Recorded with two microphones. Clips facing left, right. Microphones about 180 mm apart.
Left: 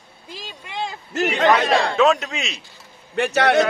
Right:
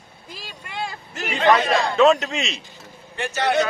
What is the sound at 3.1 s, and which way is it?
Speech, 65° left (ahead or behind).